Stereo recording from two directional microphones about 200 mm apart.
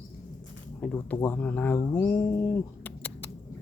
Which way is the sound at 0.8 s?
5° left (ahead or behind).